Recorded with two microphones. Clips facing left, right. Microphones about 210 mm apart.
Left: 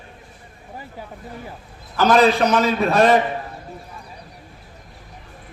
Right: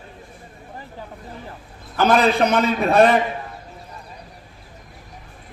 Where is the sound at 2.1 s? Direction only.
55° right (ahead or behind).